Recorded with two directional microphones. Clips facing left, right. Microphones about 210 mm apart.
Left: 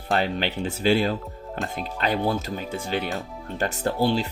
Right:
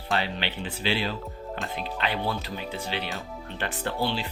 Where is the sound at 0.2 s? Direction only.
45° left (ahead or behind).